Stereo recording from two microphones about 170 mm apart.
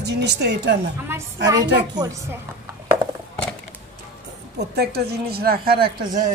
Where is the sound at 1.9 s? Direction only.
20° right (ahead or behind).